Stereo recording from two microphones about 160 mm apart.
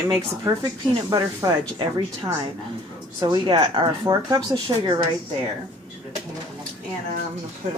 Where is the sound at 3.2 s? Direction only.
25° right (ahead or behind).